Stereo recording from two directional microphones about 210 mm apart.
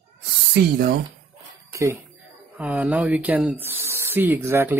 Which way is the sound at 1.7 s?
15° right (ahead or behind).